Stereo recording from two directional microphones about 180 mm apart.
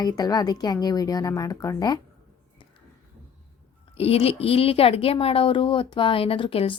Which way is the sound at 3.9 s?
35° left (ahead or behind).